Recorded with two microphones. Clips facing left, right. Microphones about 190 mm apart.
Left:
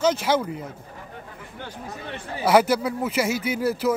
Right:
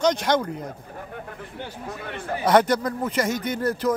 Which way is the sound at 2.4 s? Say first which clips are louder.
Even; 5° left (ahead or behind).